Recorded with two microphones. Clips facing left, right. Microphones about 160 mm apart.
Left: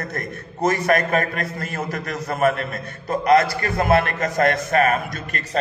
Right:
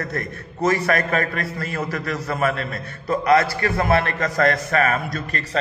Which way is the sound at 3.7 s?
45° left (ahead or behind).